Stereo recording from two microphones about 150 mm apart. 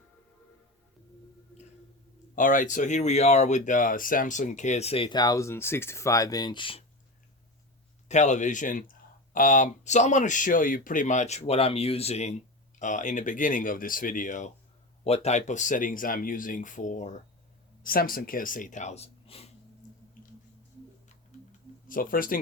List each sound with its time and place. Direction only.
2.3 s speech: 60° left (ahead or behind); by 6.8 s 35° left (ahead or behind)
8.0 s speech: 50° left (ahead or behind)
12.8 s speech: 55° left (ahead or behind)
15.0 s speech: 45° left (ahead or behind)
17.8 s speech: 75° left (ahead or behind); by 19.5 s 45° left (ahead or behind)
21.8 s speech: 70° left (ahead or behind)